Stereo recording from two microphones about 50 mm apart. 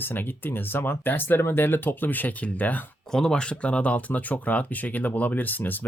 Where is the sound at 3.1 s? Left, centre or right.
Centre.